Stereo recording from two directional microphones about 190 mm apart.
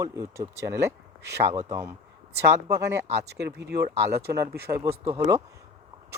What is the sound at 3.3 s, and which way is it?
Speech, 60° right (ahead or behind).